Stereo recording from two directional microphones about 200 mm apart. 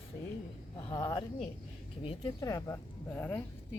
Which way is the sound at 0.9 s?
20° left (ahead or behind).